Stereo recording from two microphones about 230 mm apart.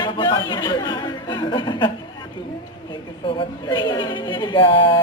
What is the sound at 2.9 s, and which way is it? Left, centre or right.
A woman's voice, left.